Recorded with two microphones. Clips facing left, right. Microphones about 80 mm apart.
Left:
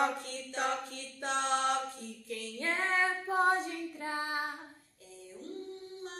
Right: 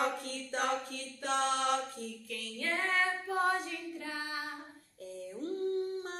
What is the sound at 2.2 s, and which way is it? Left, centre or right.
Child singing, left.